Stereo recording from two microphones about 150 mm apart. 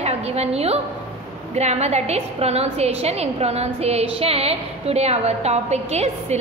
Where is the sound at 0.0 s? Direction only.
45° right (ahead or behind).